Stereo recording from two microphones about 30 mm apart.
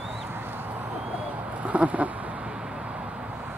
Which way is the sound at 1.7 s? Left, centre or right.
Right.